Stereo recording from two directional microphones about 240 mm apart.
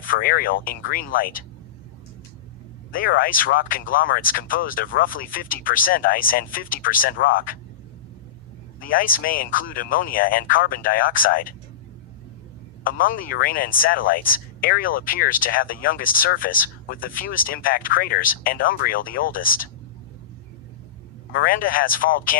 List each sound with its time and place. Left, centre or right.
0.0 s speech: left
2.9 s speech: left
8.8 s speech: left
12.8 s speech: left
21.3 s speech: left